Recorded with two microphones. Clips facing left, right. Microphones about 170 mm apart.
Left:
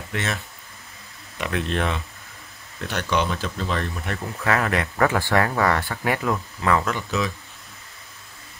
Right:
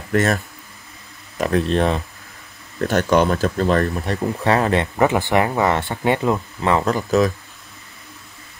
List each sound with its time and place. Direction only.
0.1 s speech: 45° right (ahead or behind)
1.4 s speech: 35° right (ahead or behind)
4.0 s speech: 30° right (ahead or behind)
6.9 s speech: 40° right (ahead or behind)